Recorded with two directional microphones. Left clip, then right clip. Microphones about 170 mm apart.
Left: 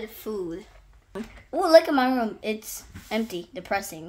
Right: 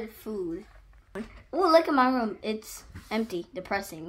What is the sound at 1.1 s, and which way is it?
A woman's voice, 5° right (ahead or behind).